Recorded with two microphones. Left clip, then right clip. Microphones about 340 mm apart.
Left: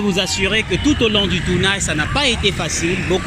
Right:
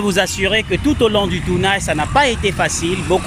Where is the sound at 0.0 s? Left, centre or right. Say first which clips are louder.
Right 2 dB; right.